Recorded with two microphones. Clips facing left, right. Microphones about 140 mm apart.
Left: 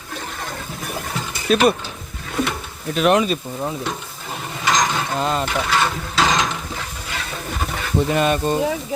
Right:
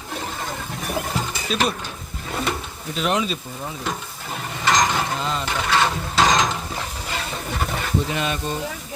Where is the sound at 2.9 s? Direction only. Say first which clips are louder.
Left 6 dB; 60° left (ahead or behind).